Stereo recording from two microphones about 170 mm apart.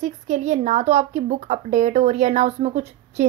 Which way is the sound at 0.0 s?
45° right (ahead or behind).